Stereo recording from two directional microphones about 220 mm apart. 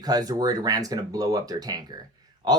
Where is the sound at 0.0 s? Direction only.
15° right (ahead or behind).